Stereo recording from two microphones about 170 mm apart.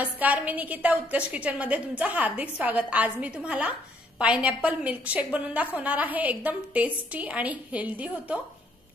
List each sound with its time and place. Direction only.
0.0 s a woman's voice: 10° right (ahead or behind)